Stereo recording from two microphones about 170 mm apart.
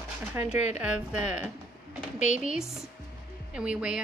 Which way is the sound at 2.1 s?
45° left (ahead or behind).